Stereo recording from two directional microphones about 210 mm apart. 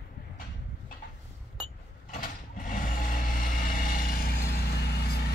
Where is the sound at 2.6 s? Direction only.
40° left (ahead or behind).